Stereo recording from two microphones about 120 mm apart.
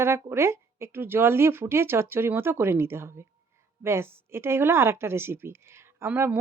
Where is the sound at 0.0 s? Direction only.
20° right (ahead or behind).